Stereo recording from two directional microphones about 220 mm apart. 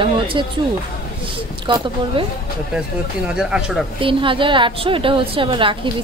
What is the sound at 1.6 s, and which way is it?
Speech, 20° right (ahead or behind).